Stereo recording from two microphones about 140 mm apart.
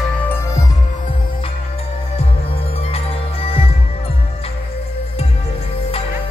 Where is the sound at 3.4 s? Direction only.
45° left (ahead or behind).